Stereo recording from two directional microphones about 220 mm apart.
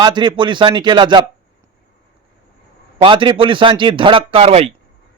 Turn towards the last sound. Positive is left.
turn(degrees=-25)  # may be behind; listen again after turning